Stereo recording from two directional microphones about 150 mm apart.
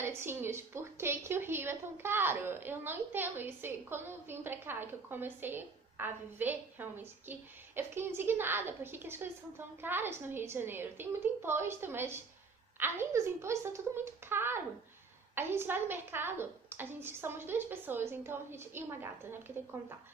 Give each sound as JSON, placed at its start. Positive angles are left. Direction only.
{"t": 0.0, "sound": "a woman's voice", "side_deg": -15}